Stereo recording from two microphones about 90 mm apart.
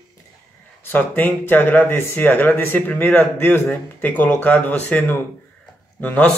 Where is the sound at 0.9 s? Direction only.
20° left (ahead or behind).